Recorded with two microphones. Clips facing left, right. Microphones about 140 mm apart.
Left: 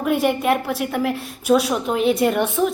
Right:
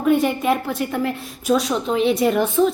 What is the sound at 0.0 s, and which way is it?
A woman's voice, centre (ahead or behind).